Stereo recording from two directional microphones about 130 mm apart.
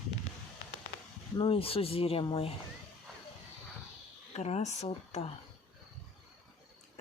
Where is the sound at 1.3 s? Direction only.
45° left (ahead or behind).